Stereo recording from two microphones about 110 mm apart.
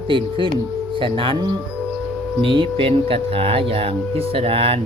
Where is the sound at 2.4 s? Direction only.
50° right (ahead or behind).